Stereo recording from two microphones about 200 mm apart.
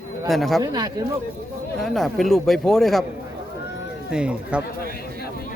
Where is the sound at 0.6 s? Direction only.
20° right (ahead or behind).